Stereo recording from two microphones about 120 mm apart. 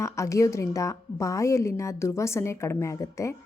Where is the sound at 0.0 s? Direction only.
25° left (ahead or behind).